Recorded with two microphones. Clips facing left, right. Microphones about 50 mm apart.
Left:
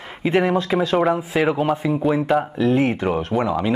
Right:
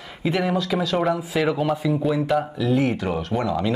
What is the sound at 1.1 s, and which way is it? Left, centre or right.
Speech, left.